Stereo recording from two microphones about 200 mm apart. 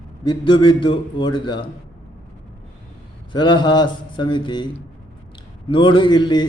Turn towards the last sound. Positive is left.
turn(degrees=25)  # may be behind; listen again after turning